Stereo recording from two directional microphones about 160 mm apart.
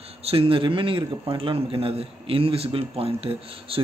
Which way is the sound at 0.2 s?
35° right (ahead or behind).